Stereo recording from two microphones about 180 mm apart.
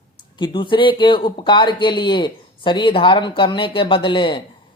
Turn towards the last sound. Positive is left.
turn(degrees=25)  # may be behind; listen again after turning